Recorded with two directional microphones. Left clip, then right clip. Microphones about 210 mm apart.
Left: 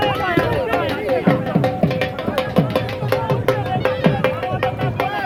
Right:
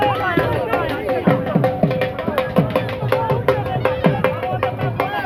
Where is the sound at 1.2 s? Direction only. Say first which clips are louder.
Right 1 dB; 5° left (ahead or behind).